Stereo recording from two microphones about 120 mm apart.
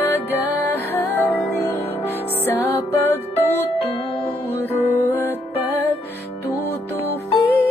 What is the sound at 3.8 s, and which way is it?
Music, 55° left (ahead or behind).